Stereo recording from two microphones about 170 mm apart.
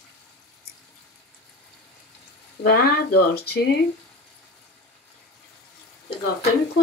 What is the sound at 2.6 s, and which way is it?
Speech, 65° left (ahead or behind).